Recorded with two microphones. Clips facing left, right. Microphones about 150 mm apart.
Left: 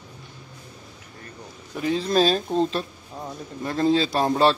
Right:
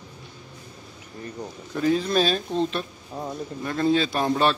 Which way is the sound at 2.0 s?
35° left (ahead or behind).